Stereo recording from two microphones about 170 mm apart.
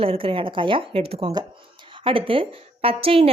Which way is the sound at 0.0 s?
35° right (ahead or behind).